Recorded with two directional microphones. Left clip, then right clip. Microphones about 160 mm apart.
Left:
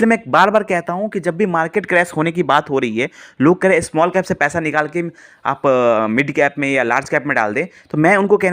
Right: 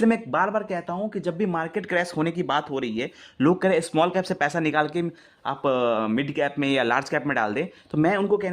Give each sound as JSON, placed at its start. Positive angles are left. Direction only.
{"t": 0.0, "sound": "speech", "side_deg": 25}
{"t": 0.3, "sound": "a man's voice", "side_deg": 40}
{"t": 1.5, "sound": "speech", "side_deg": 30}
{"t": 5.4, "sound": "speech", "side_deg": 25}
{"t": 6.7, "sound": "speech", "side_deg": 15}